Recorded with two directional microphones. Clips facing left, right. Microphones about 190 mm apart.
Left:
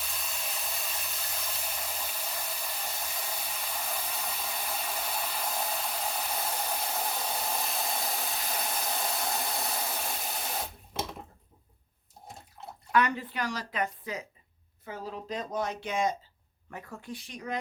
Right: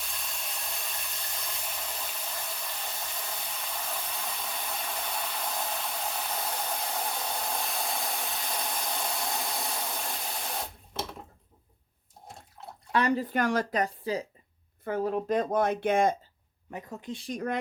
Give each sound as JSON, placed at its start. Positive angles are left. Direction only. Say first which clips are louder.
{"t": 0.0, "sound": "a sound", "louder": "left 1 dB", "side_deg": 0}
{"t": 12.9, "sound": "speech", "louder": "right 2 dB", "side_deg": -30}
{"t": 14.8, "sound": "speech", "louder": "right 10 dB", "side_deg": -55}
{"t": 16.7, "sound": "speech", "louder": "right 3 dB", "side_deg": -20}
{"t": 17.2, "sound": "speech", "louder": "right 5 dB", "side_deg": -50}